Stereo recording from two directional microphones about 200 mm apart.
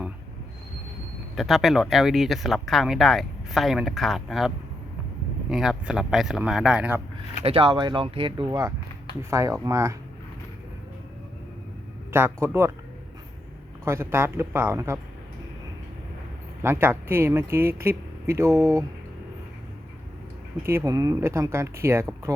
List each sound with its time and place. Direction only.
1.4 s speech: centre (ahead or behind)
7.4 s speech: 25° right (ahead or behind)
12.1 s speech: 10° right (ahead or behind)
13.8 s speech: 10° right (ahead or behind)
16.6 s speech: 10° right (ahead or behind)
20.7 s speech: 15° right (ahead or behind)